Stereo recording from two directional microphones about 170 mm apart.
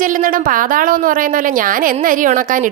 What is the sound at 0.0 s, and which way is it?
A woman's voice, 50° right (ahead or behind).